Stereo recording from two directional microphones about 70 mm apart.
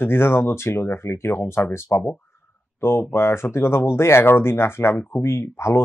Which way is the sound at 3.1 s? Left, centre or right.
Left.